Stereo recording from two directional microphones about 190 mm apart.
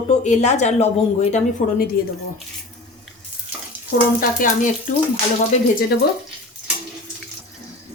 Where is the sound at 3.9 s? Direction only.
60° left (ahead or behind).